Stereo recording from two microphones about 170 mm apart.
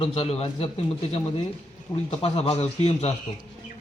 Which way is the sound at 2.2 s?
35° left (ahead or behind).